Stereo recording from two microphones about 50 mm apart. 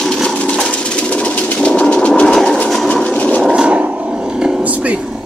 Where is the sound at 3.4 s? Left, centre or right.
Centre.